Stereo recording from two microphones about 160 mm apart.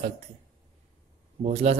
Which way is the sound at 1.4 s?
40° right (ahead or behind).